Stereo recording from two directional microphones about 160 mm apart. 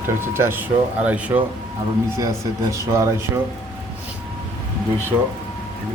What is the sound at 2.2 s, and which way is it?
Speech, 20° right (ahead or behind).